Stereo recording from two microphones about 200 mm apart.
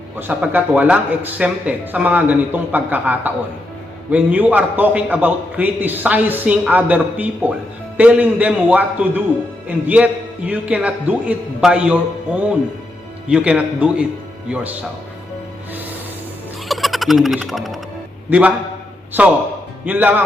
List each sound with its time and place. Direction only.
0.2 s a man's voice: 10° right (ahead or behind)
16.6 s frog: centre (ahead or behind)
18.3 s a man's voice: 5° right (ahead or behind)
19.8 s a man's voice: 10° right (ahead or behind)